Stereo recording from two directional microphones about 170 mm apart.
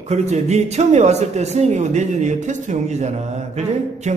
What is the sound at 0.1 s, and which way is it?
Speech, 40° right (ahead or behind).